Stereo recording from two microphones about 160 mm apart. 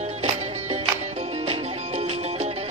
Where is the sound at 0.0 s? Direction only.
45° right (ahead or behind).